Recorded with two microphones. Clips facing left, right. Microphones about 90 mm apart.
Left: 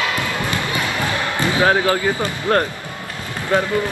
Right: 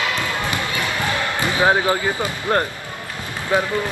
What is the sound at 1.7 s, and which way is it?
Speech, 15° right (ahead or behind).